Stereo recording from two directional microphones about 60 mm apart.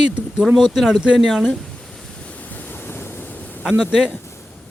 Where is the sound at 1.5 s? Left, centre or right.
Centre.